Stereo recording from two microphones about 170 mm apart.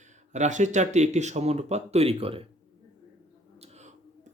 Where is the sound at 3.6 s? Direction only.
40° right (ahead or behind).